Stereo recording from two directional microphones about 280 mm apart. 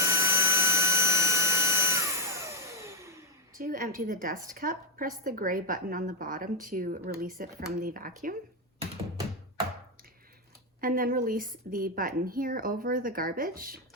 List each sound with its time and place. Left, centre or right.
0.0 s a sound: centre
3.5 s a woman's voice: right
10.8 s a woman's voice: right